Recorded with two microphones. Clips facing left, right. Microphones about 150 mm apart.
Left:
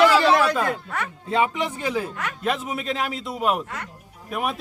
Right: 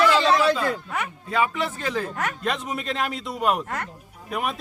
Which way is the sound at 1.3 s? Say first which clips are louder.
Left 2 dB; 25° left (ahead or behind).